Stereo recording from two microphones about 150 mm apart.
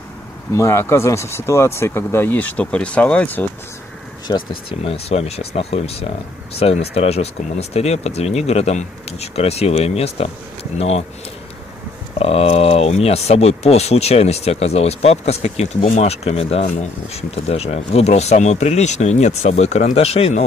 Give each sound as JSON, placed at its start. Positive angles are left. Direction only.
{"t": 0.6, "sound": "speech", "side_deg": 15}
{"t": 4.3, "sound": "speech", "side_deg": 40}
{"t": 12.2, "sound": "speech", "side_deg": 40}